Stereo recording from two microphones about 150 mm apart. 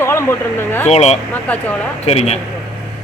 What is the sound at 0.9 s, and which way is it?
Speech, 45° left (ahead or behind).